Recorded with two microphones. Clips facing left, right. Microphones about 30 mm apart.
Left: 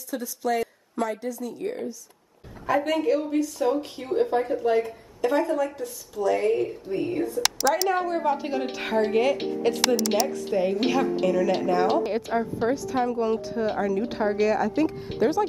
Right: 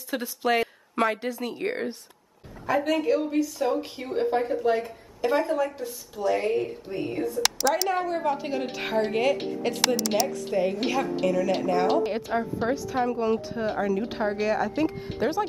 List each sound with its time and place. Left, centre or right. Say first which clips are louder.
0.1 s a woman's voice: right 2 dB; right
2.6 s a woman's voice: left 1 dB; centre